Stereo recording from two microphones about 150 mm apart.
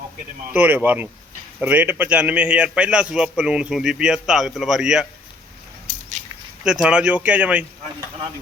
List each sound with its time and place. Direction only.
0.5 s a man's voice: 10° right (ahead or behind)
5.9 s a sound: 50° right (ahead or behind)
6.7 s speech: 5° right (ahead or behind)